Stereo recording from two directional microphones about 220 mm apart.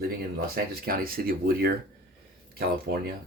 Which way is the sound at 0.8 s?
40° right (ahead or behind).